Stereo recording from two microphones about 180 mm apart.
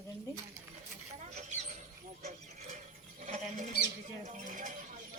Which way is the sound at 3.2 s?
45° right (ahead or behind).